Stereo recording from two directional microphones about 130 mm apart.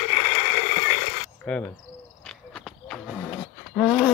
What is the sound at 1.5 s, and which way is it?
Speech, 10° left (ahead or behind).